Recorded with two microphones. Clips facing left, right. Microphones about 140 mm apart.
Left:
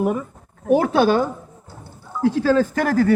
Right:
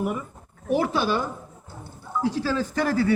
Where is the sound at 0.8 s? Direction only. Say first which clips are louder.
Left 6 dB; 60° left (ahead or behind).